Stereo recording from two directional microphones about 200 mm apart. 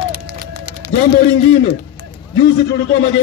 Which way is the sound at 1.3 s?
60° left (ahead or behind).